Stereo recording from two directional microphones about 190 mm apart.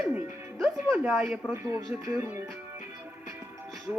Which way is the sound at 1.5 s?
15° right (ahead or behind).